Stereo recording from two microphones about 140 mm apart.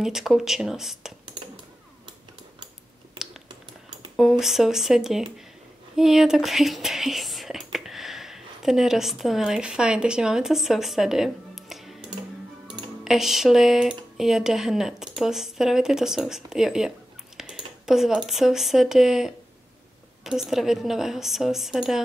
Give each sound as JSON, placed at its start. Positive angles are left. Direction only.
{"t": 0.0, "sound": "speech", "side_deg": 0}
{"t": 4.2, "sound": "speech", "side_deg": 0}
{"t": 13.0, "sound": "speech", "side_deg": -5}